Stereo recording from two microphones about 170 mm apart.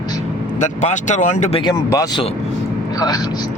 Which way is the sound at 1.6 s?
20° left (ahead or behind).